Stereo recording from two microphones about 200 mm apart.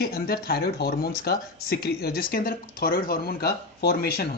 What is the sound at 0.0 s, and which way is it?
Speech, 50° left (ahead or behind).